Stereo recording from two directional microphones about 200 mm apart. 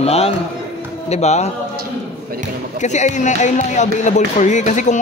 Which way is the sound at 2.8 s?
35° left (ahead or behind).